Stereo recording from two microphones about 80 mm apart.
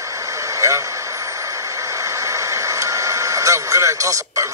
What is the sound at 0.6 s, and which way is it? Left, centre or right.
Speech, right.